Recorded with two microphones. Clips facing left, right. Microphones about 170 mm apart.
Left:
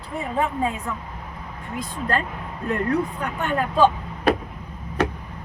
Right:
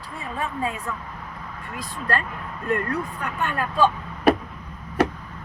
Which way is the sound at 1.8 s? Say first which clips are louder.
Left 2 dB; 20° left (ahead or behind).